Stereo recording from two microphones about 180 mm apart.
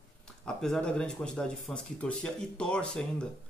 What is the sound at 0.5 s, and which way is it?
Speech, 5° left (ahead or behind).